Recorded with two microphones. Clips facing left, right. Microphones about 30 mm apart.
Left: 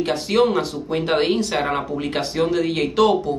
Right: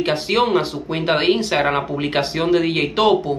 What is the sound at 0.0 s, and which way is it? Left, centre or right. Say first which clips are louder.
Speech: even; right.